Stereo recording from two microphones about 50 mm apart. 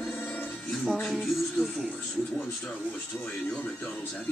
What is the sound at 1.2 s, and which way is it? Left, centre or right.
Music, centre.